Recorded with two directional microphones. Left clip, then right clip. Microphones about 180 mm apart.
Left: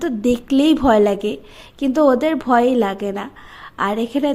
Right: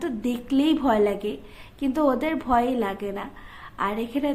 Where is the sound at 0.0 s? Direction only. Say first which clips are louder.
Left 9 dB; 35° left (ahead or behind).